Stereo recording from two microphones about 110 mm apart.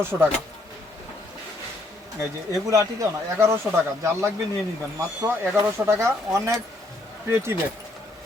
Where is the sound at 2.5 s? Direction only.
30° right (ahead or behind).